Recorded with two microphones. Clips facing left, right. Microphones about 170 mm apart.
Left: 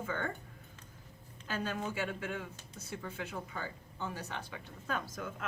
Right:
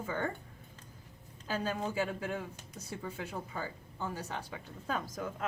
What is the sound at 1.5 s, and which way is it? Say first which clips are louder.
Speech: right 2 dB; 35° right (ahead or behind).